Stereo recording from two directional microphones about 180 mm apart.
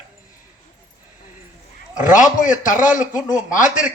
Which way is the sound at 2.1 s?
45° left (ahead or behind).